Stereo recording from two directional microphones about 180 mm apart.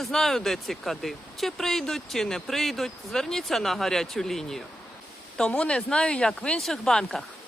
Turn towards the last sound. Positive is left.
turn(degrees=0)  # may be behind; listen again after turning